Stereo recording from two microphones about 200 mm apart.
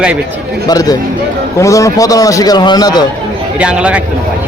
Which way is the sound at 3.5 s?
5° right (ahead or behind).